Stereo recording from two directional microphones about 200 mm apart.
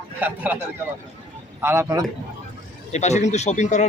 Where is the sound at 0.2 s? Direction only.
10° right (ahead or behind).